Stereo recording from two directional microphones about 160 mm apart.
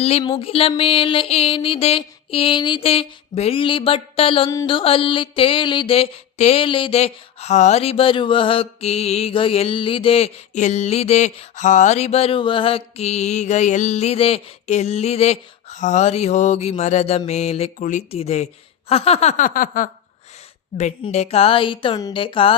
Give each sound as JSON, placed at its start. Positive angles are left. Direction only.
{"t": 0.0, "sound": "mantra", "side_deg": 40}
{"t": 18.9, "sound": "a sound", "side_deg": 40}
{"t": 21.0, "sound": "mantra", "side_deg": 40}